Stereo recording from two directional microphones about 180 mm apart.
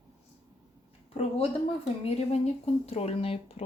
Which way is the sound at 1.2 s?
35° left (ahead or behind).